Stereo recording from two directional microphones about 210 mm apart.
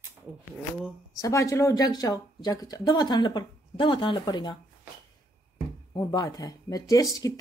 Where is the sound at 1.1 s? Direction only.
15° left (ahead or behind).